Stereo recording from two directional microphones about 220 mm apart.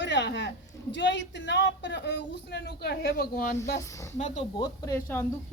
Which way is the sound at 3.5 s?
15° left (ahead or behind).